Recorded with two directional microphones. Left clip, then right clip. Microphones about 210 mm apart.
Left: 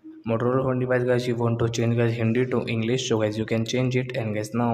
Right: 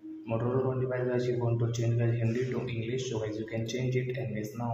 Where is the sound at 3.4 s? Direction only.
35° left (ahead or behind).